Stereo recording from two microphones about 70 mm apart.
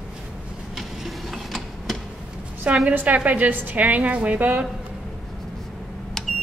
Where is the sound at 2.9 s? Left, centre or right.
Right.